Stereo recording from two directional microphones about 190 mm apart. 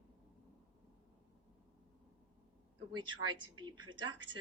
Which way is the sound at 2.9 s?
25° right (ahead or behind).